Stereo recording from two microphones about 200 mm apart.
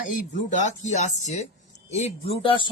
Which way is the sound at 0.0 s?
40° left (ahead or behind).